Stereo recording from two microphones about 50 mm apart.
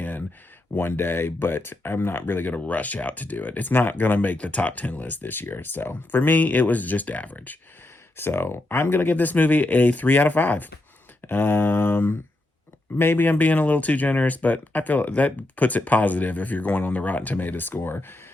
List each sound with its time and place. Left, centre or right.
0.8 s speech: left
8.1 s speech: left
13.3 s speech: left